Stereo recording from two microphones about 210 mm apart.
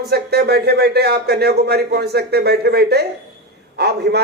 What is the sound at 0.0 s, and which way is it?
Speech, 50° right (ahead or behind).